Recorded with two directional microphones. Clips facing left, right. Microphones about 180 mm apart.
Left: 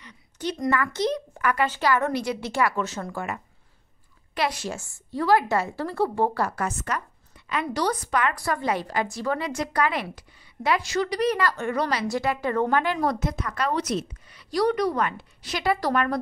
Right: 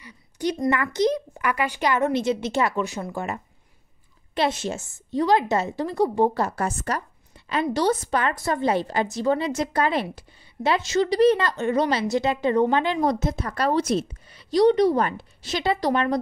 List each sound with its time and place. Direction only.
0.0 s a sound: 15° right (ahead or behind)
0.7 s a woman's voice: 15° right (ahead or behind)
4.4 s a woman's voice: 25° right (ahead or behind)